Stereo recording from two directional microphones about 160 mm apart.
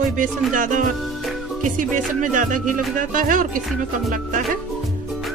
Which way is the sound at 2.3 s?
55° right (ahead or behind).